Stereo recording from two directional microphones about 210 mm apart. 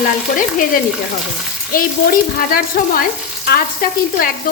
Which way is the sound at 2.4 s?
45° left (ahead or behind).